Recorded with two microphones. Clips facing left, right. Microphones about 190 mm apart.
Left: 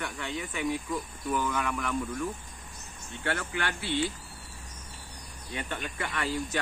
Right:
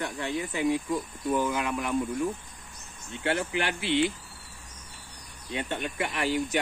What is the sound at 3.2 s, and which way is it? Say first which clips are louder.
Speech: right 4 dB; 15° right (ahead or behind).